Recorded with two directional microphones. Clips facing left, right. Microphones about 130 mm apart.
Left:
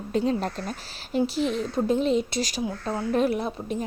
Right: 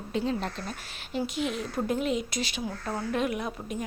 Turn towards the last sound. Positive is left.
turn(degrees=30)  # may be behind; listen again after turning